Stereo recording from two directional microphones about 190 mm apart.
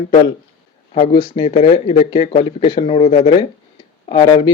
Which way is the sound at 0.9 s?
35° left (ahead or behind).